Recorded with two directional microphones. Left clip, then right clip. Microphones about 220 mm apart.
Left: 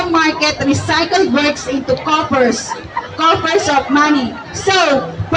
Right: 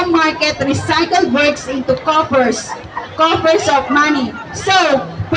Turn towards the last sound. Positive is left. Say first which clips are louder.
# even
turn(degrees=-15)  # may be behind; listen again after turning